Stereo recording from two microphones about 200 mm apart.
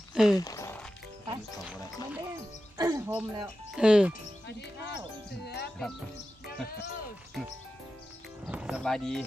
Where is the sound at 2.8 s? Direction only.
15° right (ahead or behind).